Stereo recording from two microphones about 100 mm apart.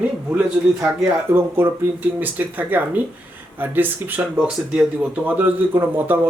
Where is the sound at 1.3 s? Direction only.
25° right (ahead or behind).